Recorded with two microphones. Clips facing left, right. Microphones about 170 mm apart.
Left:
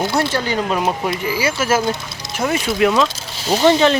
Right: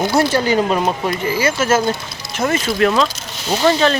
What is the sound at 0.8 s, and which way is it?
Speech, 10° left (ahead or behind).